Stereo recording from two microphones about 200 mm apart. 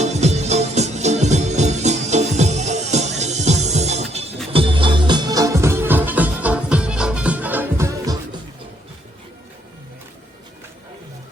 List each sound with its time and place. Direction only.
0.0 s music: 35° right (ahead or behind); by 8.4 s 15° right (ahead or behind)